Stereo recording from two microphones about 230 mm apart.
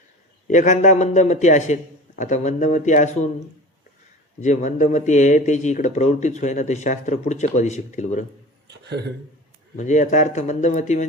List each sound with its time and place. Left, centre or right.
0.4 s speech: left
4.4 s speech: left
8.8 s a man's voice: right
9.7 s speech: left